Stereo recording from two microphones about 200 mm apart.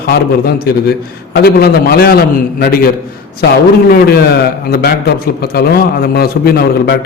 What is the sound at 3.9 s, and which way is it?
A man's voice, 50° left (ahead or behind).